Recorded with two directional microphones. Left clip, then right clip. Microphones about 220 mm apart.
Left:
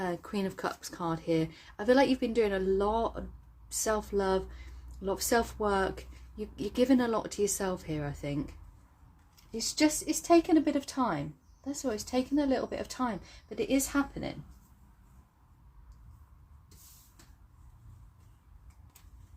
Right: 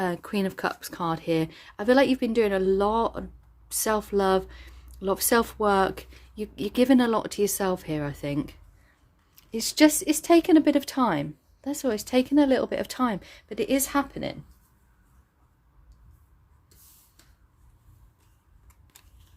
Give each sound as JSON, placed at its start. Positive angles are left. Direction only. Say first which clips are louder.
{"t": 0.0, "sound": "speech", "louder": "right 6 dB", "side_deg": -35}